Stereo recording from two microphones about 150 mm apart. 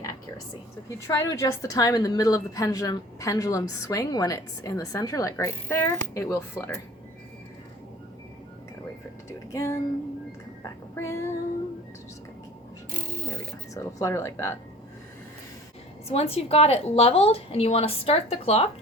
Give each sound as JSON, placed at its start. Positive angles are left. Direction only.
{"t": 0.9, "sound": "a woman's voice", "side_deg": 20}
{"t": 9.5, "sound": "speech", "side_deg": 20}
{"t": 10.6, "sound": "a sound", "side_deg": 20}
{"t": 13.7, "sound": "a woman's voice", "side_deg": 20}
{"t": 16.0, "sound": "a woman's voice", "side_deg": 40}